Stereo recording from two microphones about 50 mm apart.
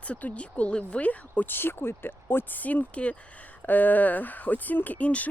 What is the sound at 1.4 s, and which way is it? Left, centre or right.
Speech, left.